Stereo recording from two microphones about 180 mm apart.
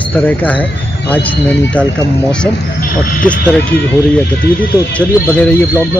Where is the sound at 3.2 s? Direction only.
5° left (ahead or behind).